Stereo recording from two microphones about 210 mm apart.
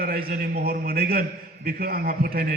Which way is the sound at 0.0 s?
45° right (ahead or behind).